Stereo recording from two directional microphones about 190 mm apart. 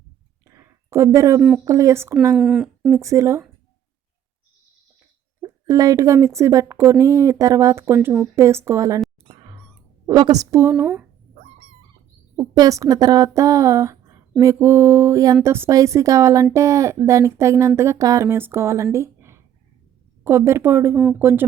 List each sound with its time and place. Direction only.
0.4 s a sound: 15° right (ahead or behind)
1.4 s speech: 5° right (ahead or behind)
1.6 s speech: 15° right (ahead or behind)
2.3 s speech: centre (ahead or behind)
3.0 s speech: 15° right (ahead or behind)
5.4 s speech: 20° right (ahead or behind)
10.1 s speech: 20° right (ahead or behind)
12.4 s speech: 15° right (ahead or behind)